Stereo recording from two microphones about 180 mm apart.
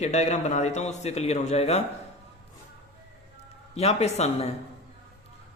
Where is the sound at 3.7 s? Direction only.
35° left (ahead or behind).